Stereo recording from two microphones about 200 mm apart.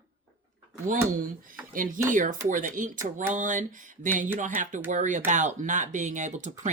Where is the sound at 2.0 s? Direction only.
40° right (ahead or behind).